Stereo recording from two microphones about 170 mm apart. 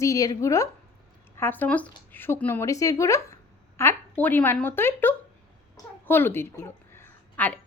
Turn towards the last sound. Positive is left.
turn(degrees=10)  # may be behind; listen again after turning